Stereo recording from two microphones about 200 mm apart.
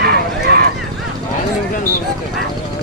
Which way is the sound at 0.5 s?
55° right (ahead or behind).